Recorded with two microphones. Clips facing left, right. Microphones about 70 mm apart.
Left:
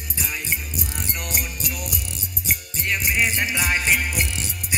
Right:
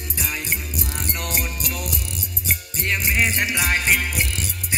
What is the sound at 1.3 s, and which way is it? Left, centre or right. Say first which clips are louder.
Music: right 2 dB; right.